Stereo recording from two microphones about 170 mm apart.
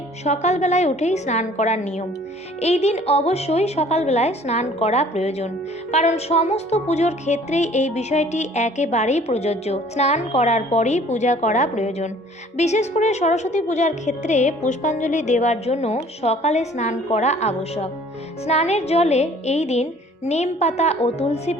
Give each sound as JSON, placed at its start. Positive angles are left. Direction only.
{"t": 0.3, "sound": "a woman's voice", "side_deg": 40}